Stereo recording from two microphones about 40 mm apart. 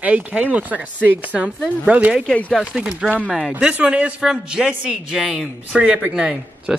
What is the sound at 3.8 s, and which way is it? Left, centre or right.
Speech, right.